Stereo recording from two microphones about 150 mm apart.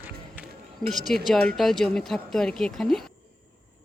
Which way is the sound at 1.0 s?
Centre (ahead or behind).